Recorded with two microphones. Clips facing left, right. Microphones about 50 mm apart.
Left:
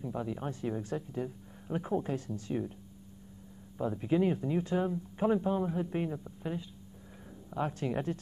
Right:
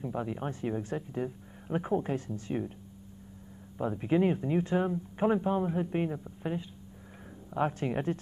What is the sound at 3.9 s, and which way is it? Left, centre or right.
Speech, right.